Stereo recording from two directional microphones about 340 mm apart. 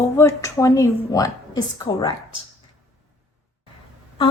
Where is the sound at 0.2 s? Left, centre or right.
Centre.